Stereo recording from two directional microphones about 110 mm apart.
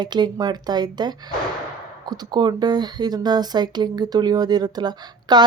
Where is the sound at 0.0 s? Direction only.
40° right (ahead or behind).